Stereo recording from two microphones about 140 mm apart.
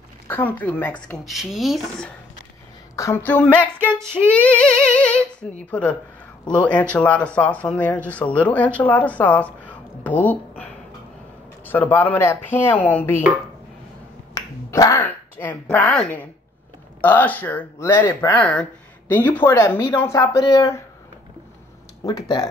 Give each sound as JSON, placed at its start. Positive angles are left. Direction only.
{"t": 0.3, "sound": "speech", "side_deg": 15}
{"t": 3.0, "sound": "speech", "side_deg": 15}
{"t": 14.3, "sound": "finger snapping", "side_deg": 25}
{"t": 15.0, "sound": "speech", "side_deg": 15}
{"t": 22.0, "sound": "speech", "side_deg": 35}